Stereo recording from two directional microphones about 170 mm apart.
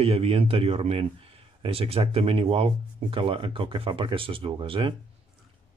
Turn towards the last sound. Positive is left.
turn(degrees=-30)  # may be behind; listen again after turning